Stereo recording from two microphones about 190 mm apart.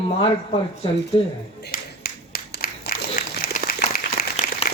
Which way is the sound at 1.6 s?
50° left (ahead or behind).